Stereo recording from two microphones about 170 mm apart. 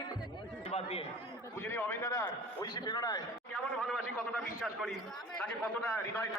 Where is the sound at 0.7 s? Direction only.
35° left (ahead or behind).